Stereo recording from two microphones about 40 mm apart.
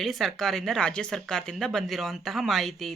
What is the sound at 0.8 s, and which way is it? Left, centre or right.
Speech, left.